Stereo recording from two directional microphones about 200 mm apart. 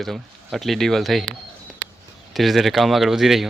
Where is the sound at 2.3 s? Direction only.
Centre (ahead or behind).